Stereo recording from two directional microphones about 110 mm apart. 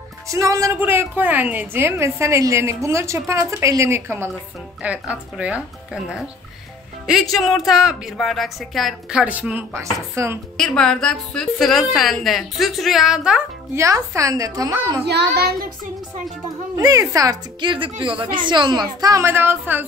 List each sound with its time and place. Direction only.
0.3 s a woman's voice: 30° right (ahead or behind)
0.7 s a woman's voice: 20° right (ahead or behind)
4.8 s speech: 10° right (ahead or behind)
7.3 s a woman's voice: centre (ahead or behind)
9.2 s speech: 10° right (ahead or behind)
9.8 s a woman's voice: 25° right (ahead or behind)
10.6 s a woman's voice: 5° left (ahead or behind)
13.7 s a woman's voice: 30° right (ahead or behind)
16.7 s a woman's voice: 30° right (ahead or behind)
17.6 s a woman's voice: 50° right (ahead or behind); by 19.9 s 20° right (ahead or behind)